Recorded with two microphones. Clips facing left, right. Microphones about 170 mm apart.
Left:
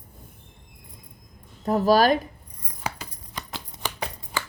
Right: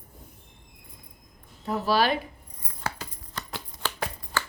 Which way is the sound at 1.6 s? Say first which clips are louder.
Left 6 dB; 45° left (ahead or behind).